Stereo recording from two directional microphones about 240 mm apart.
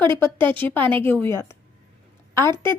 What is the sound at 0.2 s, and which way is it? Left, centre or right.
A woman's voice, centre.